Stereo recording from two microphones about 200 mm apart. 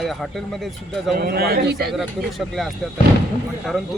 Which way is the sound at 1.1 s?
50° right (ahead or behind).